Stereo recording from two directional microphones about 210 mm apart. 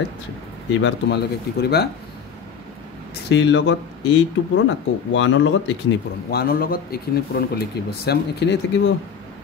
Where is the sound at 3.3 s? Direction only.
60° left (ahead or behind).